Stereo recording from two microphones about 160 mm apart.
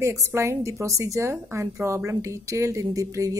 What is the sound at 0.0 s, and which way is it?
A woman's voice, 20° right (ahead or behind).